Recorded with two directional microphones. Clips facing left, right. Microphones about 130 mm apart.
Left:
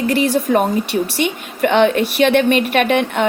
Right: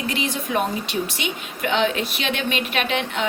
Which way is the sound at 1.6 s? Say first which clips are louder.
Left 8 dB; 60° left (ahead or behind).